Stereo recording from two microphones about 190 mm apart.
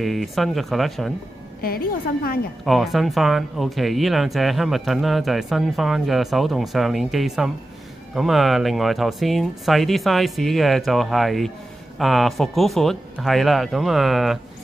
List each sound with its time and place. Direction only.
0.0 s speech: centre (ahead or behind)
1.6 s a woman's voice: 50° left (ahead or behind)
2.6 s speech: centre (ahead or behind)